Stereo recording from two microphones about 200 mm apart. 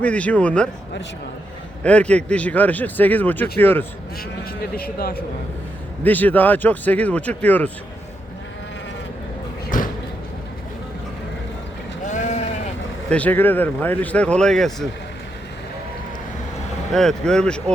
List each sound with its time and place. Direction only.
0.0 s speech: 5° left (ahead or behind)
1.8 s speech: 5° left (ahead or behind)
4.7 s speech: 50° left (ahead or behind)
6.0 s speech: 10° left (ahead or behind)
9.7 s a sound: 40° left (ahead or behind)
12.0 s sheep: 35° left (ahead or behind)
13.1 s speech: 5° left (ahead or behind)
16.9 s speech: centre (ahead or behind)